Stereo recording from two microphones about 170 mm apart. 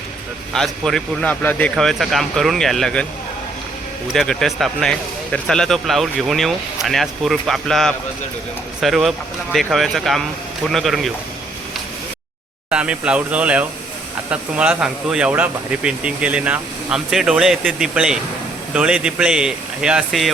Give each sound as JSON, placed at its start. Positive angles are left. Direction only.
{"t": 0.5, "sound": "a man's voice", "side_deg": 0}
{"t": 4.1, "sound": "speech", "side_deg": 0}
{"t": 12.7, "sound": "speech", "side_deg": -5}